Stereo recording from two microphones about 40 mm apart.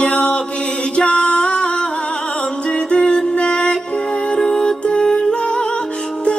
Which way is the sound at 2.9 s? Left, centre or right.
Left.